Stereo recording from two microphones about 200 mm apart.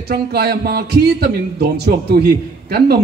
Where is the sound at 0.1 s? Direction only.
55° right (ahead or behind).